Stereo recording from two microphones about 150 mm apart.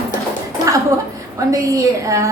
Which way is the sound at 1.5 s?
20° right (ahead or behind).